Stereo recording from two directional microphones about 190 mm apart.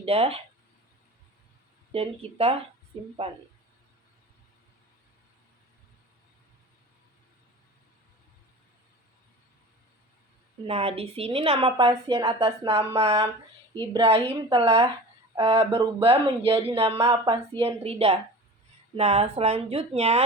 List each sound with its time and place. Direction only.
0.0 s speech: 30° right (ahead or behind)
1.9 s speech: 30° right (ahead or behind)
10.7 s a woman's voice: 30° right (ahead or behind)